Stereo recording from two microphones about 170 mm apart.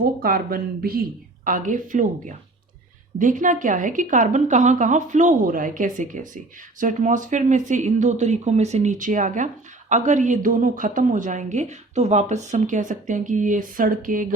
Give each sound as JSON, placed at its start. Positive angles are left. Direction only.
{"t": 0.0, "sound": "a woman's voice", "side_deg": -60}